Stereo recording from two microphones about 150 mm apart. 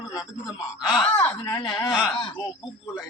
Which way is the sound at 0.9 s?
Centre (ahead or behind).